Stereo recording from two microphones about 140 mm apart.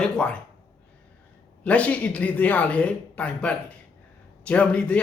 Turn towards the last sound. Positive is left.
turn(degrees=10)  # may be behind; listen again after turning